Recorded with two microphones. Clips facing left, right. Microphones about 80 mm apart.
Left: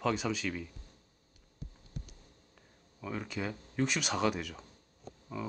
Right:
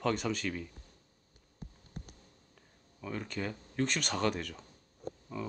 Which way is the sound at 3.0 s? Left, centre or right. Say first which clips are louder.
Even; centre.